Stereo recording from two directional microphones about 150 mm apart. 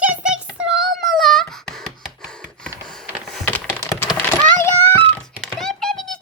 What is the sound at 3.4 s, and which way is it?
Computer keyboard, 10° left (ahead or behind).